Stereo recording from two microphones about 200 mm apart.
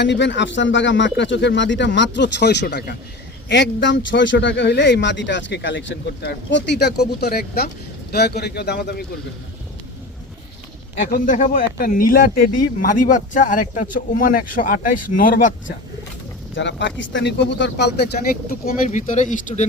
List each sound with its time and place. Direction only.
0.0 s speech: 60° left (ahead or behind)
3.5 s speech: 65° left (ahead or behind)
11.1 s speech: 40° left (ahead or behind)
16.6 s speech: 65° left (ahead or behind)
18.6 s speech: 40° left (ahead or behind)